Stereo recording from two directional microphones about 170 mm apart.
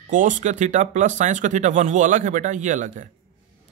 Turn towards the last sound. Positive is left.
turn(degrees=-50)  # may be behind; listen again after turning